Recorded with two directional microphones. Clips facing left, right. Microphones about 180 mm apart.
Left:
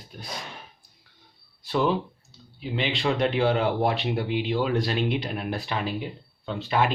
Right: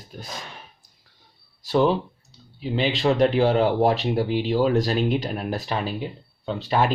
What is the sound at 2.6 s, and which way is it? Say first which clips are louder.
Speech: right 5 dB; 40° right (ahead or behind).